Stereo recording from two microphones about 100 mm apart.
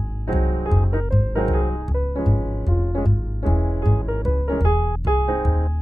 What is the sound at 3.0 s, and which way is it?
Music, centre (ahead or behind).